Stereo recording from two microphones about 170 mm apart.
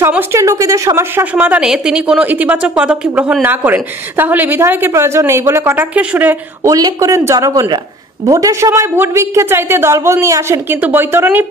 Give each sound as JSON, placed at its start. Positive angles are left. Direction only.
{"t": 0.0, "sound": "a woman's voice", "side_deg": -15}